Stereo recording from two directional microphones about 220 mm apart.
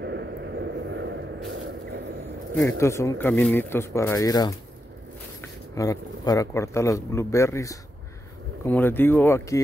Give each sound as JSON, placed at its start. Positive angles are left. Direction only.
{"t": 0.0, "sound": "vehicle", "side_deg": -50}
{"t": 2.6, "sound": "speech", "side_deg": 15}
{"t": 5.8, "sound": "speech", "side_deg": 15}